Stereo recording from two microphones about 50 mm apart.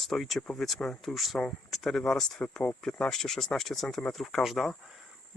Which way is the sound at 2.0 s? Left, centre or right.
Centre.